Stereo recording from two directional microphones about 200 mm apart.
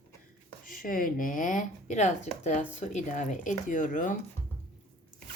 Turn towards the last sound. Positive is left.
turn(degrees=40)  # may be behind; listen again after turning